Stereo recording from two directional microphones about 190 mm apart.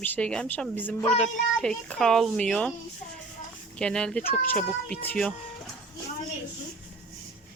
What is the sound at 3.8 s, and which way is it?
Speech, 5° left (ahead or behind).